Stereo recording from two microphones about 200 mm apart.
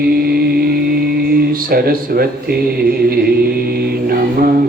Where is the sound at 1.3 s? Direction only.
50° right (ahead or behind).